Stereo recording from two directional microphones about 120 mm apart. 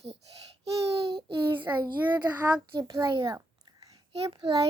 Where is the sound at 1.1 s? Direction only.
40° right (ahead or behind).